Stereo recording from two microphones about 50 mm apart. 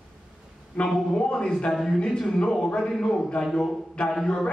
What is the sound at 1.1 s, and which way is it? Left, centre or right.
A man's voice, centre.